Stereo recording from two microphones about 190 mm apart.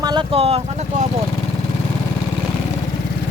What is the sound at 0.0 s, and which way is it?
Speech, 25° right (ahead or behind).